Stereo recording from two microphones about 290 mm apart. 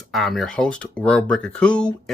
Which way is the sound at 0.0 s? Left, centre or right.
Centre.